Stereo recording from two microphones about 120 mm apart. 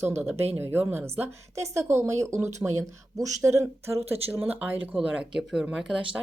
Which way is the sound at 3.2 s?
25° right (ahead or behind).